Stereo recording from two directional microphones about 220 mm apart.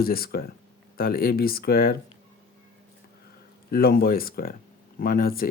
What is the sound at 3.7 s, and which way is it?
Speech, 45° left (ahead or behind).